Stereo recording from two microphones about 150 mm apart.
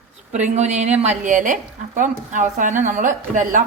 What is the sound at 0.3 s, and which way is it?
A woman's voice, 50° right (ahead or behind).